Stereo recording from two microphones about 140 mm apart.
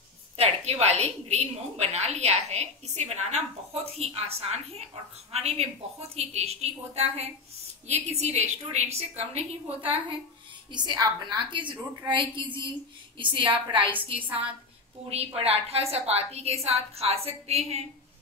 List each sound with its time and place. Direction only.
0.4 s a woman's voice: 50° right (ahead or behind)
15.0 s a woman's voice: 45° right (ahead or behind)